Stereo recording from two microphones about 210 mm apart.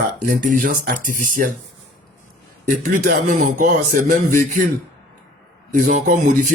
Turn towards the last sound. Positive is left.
turn(degrees=-40)  # may be behind; listen again after turning